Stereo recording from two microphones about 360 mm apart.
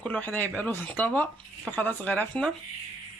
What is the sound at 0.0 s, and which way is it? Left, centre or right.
Speech, centre.